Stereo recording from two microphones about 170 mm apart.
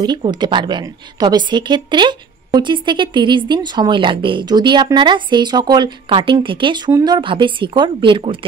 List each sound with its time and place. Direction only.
0.0 s a woman's voice: 25° right (ahead or behind)